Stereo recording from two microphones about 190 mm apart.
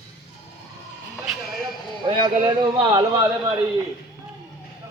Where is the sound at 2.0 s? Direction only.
30° right (ahead or behind).